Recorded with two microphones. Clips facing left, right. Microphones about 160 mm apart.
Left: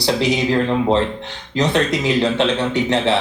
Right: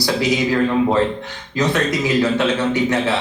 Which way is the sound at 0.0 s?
20° left (ahead or behind).